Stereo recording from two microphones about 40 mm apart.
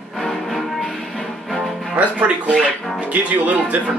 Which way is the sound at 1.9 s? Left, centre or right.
Right.